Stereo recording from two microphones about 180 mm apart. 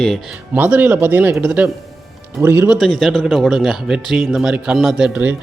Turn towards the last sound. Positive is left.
turn(degrees=-10)  # may be behind; listen again after turning